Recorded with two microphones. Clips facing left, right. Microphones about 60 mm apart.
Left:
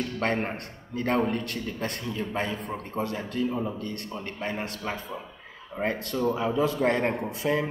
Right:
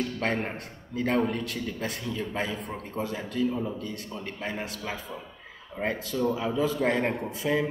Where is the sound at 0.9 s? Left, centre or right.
Centre.